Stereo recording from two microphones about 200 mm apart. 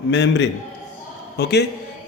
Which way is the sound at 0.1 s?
60° left (ahead or behind).